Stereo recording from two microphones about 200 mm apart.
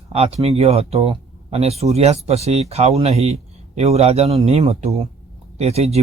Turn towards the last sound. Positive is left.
turn(degrees=-30)  # may be behind; listen again after turning